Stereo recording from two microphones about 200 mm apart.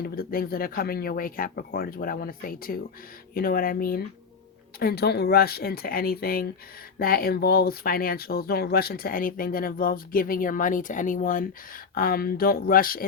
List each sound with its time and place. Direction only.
0.0 s speech: 45° left (ahead or behind)